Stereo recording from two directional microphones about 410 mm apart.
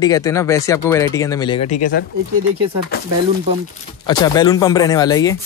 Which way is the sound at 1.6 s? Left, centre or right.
Left.